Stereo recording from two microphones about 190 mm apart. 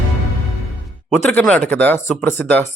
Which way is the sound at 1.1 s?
10° left (ahead or behind).